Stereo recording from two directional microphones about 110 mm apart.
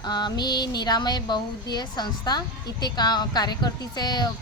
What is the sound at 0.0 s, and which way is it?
A woman's voice, 40° left (ahead or behind).